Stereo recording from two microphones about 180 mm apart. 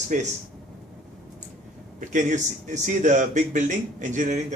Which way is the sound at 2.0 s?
45° right (ahead or behind).